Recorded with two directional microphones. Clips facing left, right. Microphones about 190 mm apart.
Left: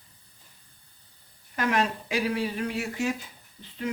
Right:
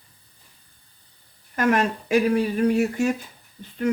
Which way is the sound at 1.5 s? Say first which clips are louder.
Right 5 dB; 50° right (ahead or behind).